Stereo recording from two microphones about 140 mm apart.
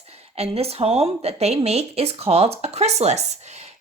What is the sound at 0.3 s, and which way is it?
Speech, 45° right (ahead or behind).